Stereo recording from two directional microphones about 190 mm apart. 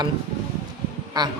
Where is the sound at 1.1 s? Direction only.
20° right (ahead or behind).